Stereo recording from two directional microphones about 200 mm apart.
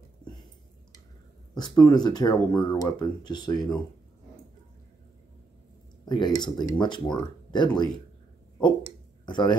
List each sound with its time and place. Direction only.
1.5 s speech: 20° left (ahead or behind)
6.0 s speech: 20° left (ahead or behind)
9.2 s speech: 20° left (ahead or behind)